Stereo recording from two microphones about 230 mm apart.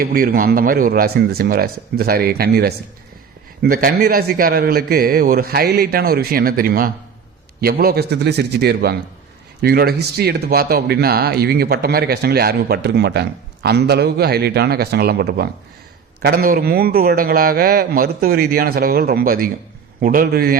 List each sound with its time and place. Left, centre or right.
0.0 s a man's voice: right